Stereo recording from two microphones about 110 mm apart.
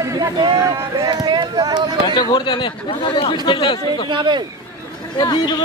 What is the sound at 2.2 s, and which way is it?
Speech, 45° left (ahead or behind).